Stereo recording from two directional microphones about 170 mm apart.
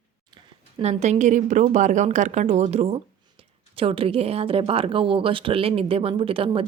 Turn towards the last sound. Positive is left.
turn(degrees=-30)  # may be behind; listen again after turning